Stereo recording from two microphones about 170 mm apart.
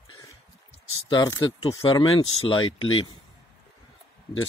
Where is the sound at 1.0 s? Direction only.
25° left (ahead or behind).